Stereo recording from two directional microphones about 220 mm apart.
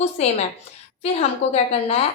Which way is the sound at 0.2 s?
30° left (ahead or behind).